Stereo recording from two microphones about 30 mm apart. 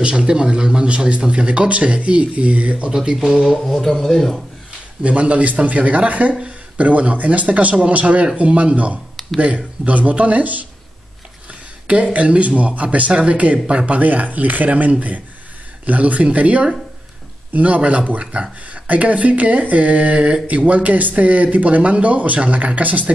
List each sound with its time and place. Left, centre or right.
0.0 s a man's voice: right
0.8 s a man's voice: right
2.9 s speech: right
3.4 s a sound: centre
3.8 s speech: centre
5.0 s speech: right
11.9 s speech: right
13.1 s a man's voice: right
13.8 s speech: right
17.6 s speech: right
18.2 s a man's voice: right
18.7 s speech: right